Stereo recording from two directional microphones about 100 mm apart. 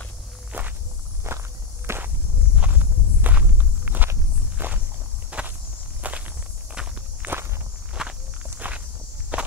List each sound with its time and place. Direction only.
0.5 s walk: 15° right (ahead or behind)
1.3 s walk: 25° right (ahead or behind)
2.5 s walk: 15° right (ahead or behind)